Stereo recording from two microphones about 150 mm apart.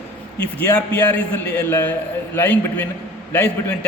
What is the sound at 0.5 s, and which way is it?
A man's voice, 10° left (ahead or behind).